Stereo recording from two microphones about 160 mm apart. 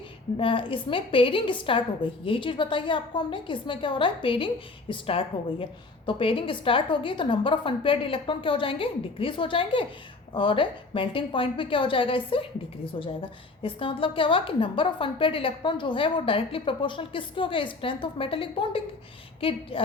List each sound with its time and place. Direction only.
0.3 s a woman's voice: 35° left (ahead or behind)